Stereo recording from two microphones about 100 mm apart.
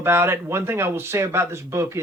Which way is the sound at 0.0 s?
25° right (ahead or behind).